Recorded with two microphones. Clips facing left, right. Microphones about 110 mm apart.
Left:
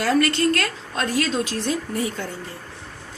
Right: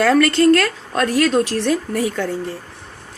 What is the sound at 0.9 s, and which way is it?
A woman's voice, 65° right (ahead or behind).